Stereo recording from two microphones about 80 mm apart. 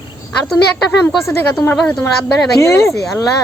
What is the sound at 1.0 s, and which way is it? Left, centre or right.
Speech, left.